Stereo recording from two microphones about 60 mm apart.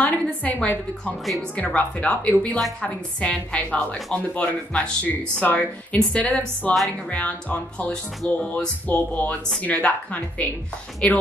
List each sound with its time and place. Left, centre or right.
0.0 s a woman's voice: left